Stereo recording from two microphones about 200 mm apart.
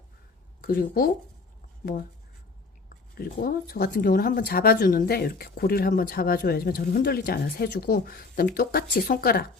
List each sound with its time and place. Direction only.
0.6 s speech: 45° left (ahead or behind)
3.2 s speech: 50° left (ahead or behind)